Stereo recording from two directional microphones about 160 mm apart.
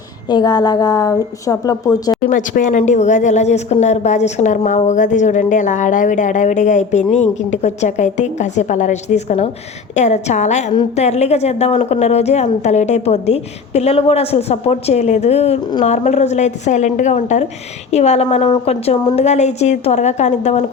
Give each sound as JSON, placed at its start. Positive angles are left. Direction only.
{"t": 0.3, "sound": "a woman's voice", "side_deg": 25}
{"t": 2.2, "sound": "speech", "side_deg": 55}
{"t": 18.4, "sound": "a woman's voice", "side_deg": 30}
{"t": 18.7, "sound": "speech", "side_deg": 40}